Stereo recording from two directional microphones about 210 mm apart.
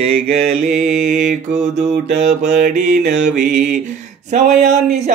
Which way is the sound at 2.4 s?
45° right (ahead or behind).